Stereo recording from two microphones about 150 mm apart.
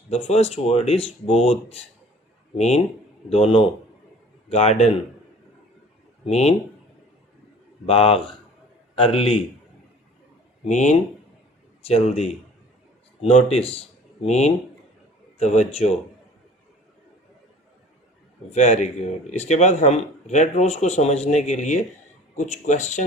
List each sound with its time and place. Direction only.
0.1 s a man's voice: 45° left (ahead or behind)
6.2 s speech: 45° left (ahead or behind)
7.9 s a man's voice: 40° left (ahead or behind)
10.7 s speech: 55° left (ahead or behind)
11.8 s speech: 40° left (ahead or behind)
18.5 s speech: 50° left (ahead or behind)